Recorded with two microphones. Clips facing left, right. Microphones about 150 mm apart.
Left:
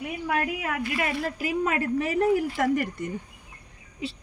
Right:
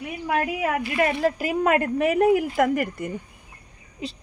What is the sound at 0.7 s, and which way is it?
Speech, 40° right (ahead or behind).